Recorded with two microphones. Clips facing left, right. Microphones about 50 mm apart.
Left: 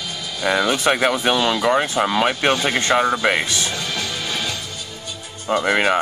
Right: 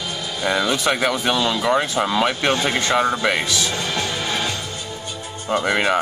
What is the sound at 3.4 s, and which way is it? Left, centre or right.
Speech, left.